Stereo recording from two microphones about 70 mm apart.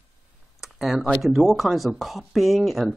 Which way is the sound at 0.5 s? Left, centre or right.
Centre.